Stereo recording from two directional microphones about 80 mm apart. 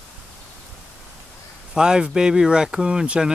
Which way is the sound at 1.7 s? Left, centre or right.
Centre.